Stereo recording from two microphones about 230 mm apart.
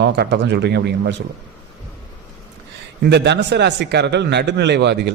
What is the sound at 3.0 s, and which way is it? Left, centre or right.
Speech, right.